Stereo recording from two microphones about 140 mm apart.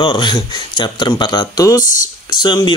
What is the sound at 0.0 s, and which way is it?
Speech, 35° left (ahead or behind).